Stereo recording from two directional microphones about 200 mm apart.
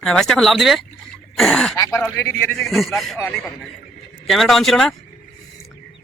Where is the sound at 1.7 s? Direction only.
15° left (ahead or behind).